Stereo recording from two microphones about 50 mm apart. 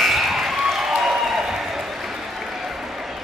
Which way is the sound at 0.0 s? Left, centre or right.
Centre.